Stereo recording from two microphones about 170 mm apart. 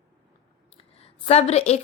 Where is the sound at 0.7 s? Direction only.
35° left (ahead or behind).